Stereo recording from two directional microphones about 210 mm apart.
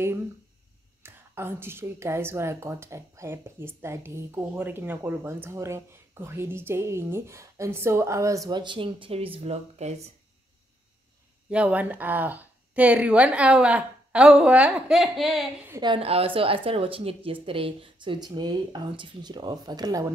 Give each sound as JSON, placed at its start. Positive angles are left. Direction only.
{"t": 1.0, "sound": "a woman's voice", "side_deg": -10}
{"t": 11.5, "sound": "a woman's voice", "side_deg": -5}
{"t": 15.7, "sound": "speech", "side_deg": -20}